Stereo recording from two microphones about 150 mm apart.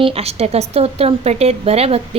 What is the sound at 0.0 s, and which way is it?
A woman's voice, 45° right (ahead or behind).